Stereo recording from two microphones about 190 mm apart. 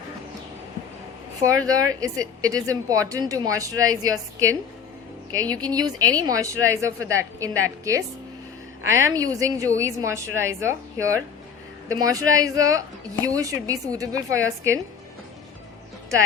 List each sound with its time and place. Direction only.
1.5 s speech: 20° right (ahead or behind)
5.5 s a woman's voice: 20° right (ahead or behind)